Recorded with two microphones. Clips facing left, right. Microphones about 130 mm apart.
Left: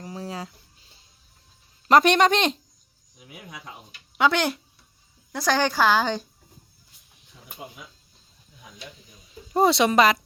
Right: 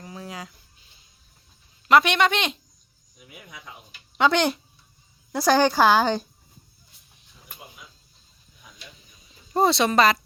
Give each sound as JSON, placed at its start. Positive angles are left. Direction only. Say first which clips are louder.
{"t": 0.0, "sound": "a sound", "louder": "left 3 dB", "side_deg": 30}
{"t": 1.9, "sound": "speech", "louder": "left 2 dB", "side_deg": 40}
{"t": 4.2, "sound": "speech", "louder": "right 1 dB", "side_deg": 5}
{"t": 5.4, "sound": "a woman's voice", "louder": "right 4 dB", "side_deg": -10}
{"t": 9.5, "sound": "speech", "louder": "left 1 dB", "side_deg": 10}